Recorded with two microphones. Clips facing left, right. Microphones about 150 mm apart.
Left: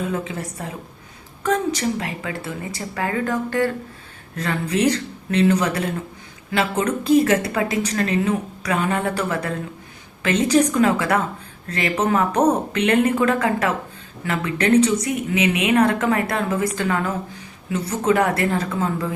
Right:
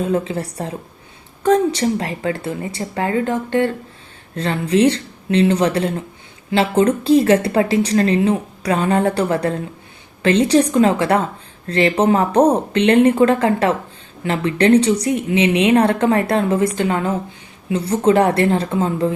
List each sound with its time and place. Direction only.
0.1 s speech: 30° right (ahead or behind)